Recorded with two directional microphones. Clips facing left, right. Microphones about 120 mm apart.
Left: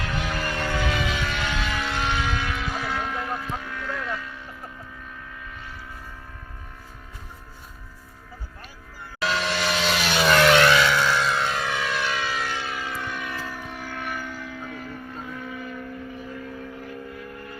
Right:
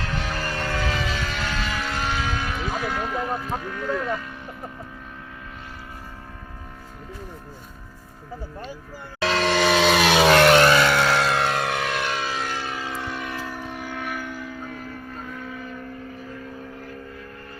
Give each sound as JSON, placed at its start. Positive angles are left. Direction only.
{"t": 0.0, "sound": "music", "side_deg": -35}
{"t": 1.4, "sound": "vehicle", "side_deg": 0}
{"t": 2.4, "sound": "vehicle", "side_deg": -40}
{"t": 2.8, "sound": "music", "side_deg": -5}
{"t": 3.2, "sound": "music", "side_deg": -40}
{"t": 9.2, "sound": "vehicle", "side_deg": -90}
{"t": 10.3, "sound": "vehicle", "side_deg": -40}
{"t": 10.9, "sound": "music", "side_deg": -65}
{"t": 12.5, "sound": "vehicle", "side_deg": -35}
{"t": 13.6, "sound": "a sound", "side_deg": -15}
{"t": 14.0, "sound": "a sound", "side_deg": -5}